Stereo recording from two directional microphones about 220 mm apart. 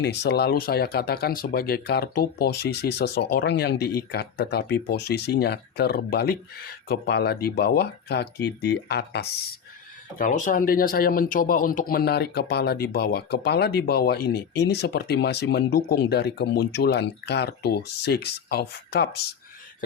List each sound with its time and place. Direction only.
0.0 s speech: 50° left (ahead or behind)
10.2 s speech: 35° left (ahead or behind)